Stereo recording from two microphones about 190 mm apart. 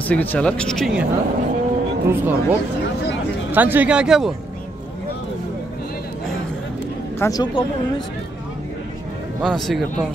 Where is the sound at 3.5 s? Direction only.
10° right (ahead or behind).